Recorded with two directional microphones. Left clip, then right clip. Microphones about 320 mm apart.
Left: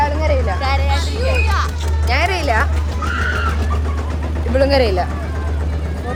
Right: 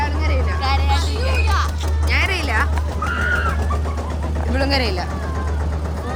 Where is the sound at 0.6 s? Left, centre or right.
Centre.